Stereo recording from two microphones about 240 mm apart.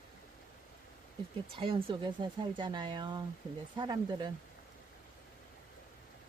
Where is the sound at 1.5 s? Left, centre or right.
Right.